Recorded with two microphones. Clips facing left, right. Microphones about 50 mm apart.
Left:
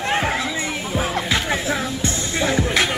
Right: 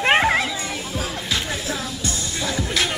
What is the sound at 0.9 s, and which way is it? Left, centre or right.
Music, left.